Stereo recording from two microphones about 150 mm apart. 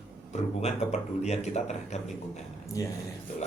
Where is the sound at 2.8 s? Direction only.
25° left (ahead or behind).